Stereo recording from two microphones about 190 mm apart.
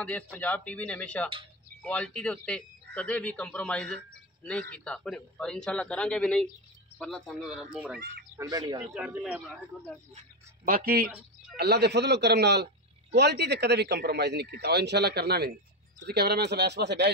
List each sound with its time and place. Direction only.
0.0 s a man's voice: 5° left (ahead or behind)
8.4 s speech: 20° right (ahead or behind)
8.8 s a man's voice: 5° right (ahead or behind)
10.1 s speech: 45° right (ahead or behind); by 17.1 s 65° right (ahead or behind)